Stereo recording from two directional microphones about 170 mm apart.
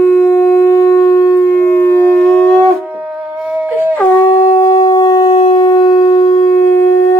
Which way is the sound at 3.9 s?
15° left (ahead or behind).